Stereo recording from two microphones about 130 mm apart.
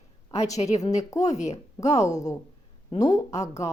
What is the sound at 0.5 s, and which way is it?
Speech, 60° left (ahead or behind).